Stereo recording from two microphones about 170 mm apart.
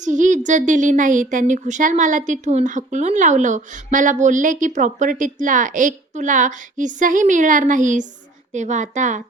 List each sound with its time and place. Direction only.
0.0 s a woman's voice: 45° right (ahead or behind)